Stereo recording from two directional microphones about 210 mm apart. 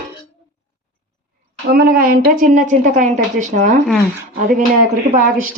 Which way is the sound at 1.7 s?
45° right (ahead or behind).